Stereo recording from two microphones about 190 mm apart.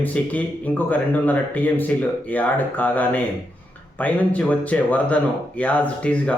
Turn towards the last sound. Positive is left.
turn(degrees=5)  # may be behind; listen again after turning